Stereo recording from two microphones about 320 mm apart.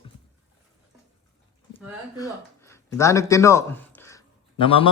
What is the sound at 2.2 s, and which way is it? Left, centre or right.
A man's voice, centre.